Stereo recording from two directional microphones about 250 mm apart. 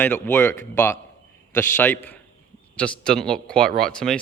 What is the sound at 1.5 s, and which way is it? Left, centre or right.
A man's voice, centre.